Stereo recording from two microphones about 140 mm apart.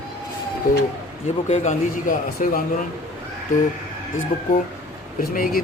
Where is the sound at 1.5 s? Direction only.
70° left (ahead or behind).